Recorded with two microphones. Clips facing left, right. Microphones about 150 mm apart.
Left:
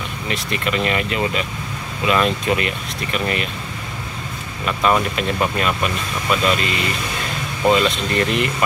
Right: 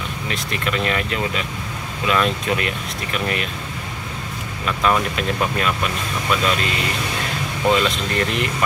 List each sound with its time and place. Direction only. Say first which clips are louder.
0.3 s speech: left 2 dB; centre (ahead or behind)
4.6 s speech: left 2 dB; 5° left (ahead or behind)